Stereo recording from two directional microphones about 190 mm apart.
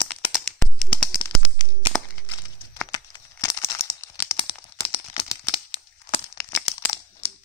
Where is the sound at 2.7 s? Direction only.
20° left (ahead or behind).